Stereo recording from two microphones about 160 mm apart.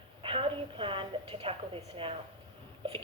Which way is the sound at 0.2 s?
35° right (ahead or behind).